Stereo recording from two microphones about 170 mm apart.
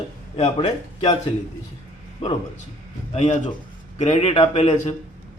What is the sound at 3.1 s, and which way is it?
A man's voice, 40° left (ahead or behind).